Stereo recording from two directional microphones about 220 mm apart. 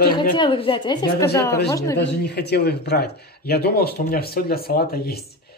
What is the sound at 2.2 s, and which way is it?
Speech, 50° left (ahead or behind).